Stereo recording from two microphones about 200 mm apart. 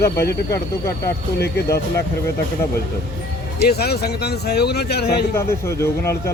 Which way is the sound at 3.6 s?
55° left (ahead or behind).